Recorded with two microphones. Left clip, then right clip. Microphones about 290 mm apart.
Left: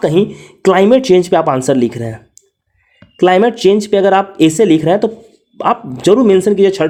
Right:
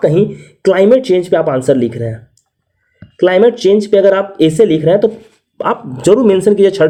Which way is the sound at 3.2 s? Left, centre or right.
Centre.